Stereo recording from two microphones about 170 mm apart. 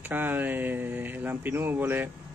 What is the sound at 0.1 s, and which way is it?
Speech, 10° right (ahead or behind).